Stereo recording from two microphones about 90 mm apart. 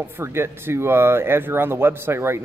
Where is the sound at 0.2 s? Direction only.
30° right (ahead or behind).